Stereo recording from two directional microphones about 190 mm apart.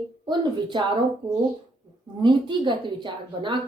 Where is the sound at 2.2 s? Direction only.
25° right (ahead or behind).